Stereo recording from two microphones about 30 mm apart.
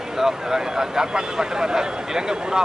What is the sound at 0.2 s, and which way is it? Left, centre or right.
Speech, centre.